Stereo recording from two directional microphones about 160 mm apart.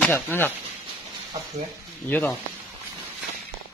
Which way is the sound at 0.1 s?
15° left (ahead or behind).